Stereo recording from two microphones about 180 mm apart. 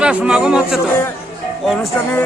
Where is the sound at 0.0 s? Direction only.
5° right (ahead or behind).